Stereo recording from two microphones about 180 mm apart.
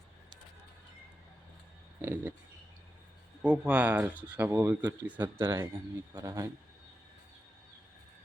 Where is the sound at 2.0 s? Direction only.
10° right (ahead or behind).